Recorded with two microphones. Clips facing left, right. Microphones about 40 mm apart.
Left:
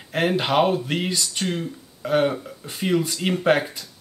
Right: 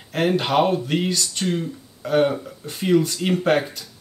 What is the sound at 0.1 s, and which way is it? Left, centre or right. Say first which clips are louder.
Speech: right 1 dB; centre.